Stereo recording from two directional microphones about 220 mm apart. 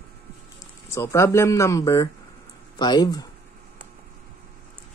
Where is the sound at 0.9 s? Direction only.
10° left (ahead or behind).